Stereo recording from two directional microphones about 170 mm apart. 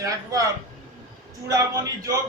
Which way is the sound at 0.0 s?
20° right (ahead or behind).